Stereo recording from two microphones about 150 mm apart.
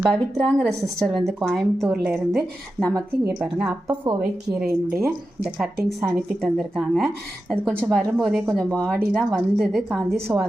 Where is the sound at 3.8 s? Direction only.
30° right (ahead or behind).